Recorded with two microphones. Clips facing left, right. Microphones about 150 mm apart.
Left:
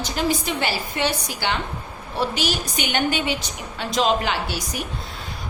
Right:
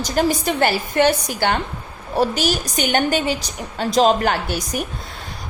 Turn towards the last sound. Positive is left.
turn(degrees=-50)  # may be behind; listen again after turning